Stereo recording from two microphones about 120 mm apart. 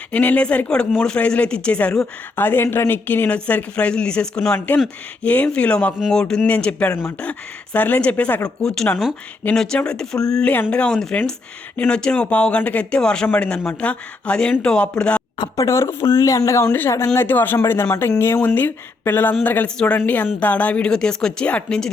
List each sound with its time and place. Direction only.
0.1 s speech: 10° left (ahead or behind)
8.6 s speech: 5° left (ahead or behind)
15.4 s speech: 30° left (ahead or behind); by 21.8 s 10° left (ahead or behind)